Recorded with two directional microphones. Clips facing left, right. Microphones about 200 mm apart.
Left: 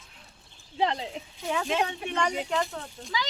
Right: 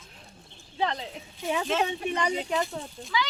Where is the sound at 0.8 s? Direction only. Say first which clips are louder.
Left 2 dB; 25° left (ahead or behind).